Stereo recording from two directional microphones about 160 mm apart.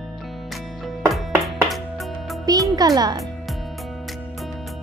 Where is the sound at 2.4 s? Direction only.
20° right (ahead or behind).